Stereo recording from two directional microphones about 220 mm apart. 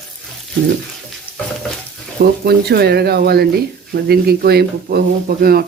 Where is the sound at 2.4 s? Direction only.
45° right (ahead or behind).